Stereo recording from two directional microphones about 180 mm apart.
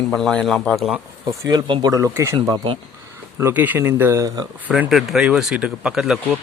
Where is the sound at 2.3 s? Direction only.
25° right (ahead or behind).